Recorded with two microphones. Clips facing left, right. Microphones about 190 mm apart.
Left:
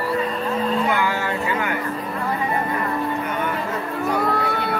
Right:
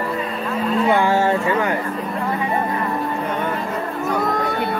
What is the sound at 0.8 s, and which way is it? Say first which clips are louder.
Speech: right 6 dB; 30° right (ahead or behind).